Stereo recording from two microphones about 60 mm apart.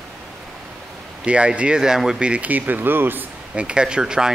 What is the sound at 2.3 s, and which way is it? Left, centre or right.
Speech, right.